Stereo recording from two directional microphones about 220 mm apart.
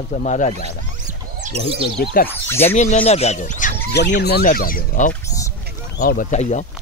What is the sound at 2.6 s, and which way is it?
Speech, 30° left (ahead or behind).